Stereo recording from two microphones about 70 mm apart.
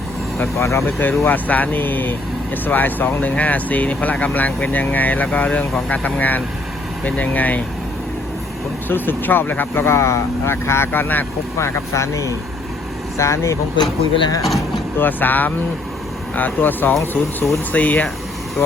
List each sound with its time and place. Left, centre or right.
0.6 s speech: left
0.9 s speech: left
8.9 s speech: left
11.5 s speech: left
13.7 s speech: left
14.9 s speech: left